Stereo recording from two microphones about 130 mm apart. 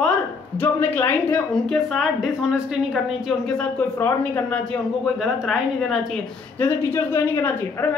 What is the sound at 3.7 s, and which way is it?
Speech, 15° left (ahead or behind).